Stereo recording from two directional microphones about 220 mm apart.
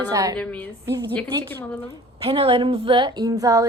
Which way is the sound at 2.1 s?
25° right (ahead or behind).